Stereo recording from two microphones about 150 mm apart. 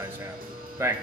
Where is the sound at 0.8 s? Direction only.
20° right (ahead or behind).